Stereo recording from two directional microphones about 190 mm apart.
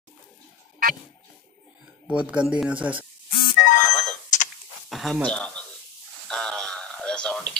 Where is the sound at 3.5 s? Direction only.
40° left (ahead or behind).